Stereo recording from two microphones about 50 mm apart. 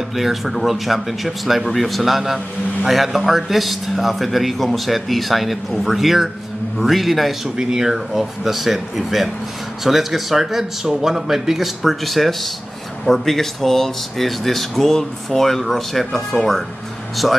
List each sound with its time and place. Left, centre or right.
0.1 s speech: centre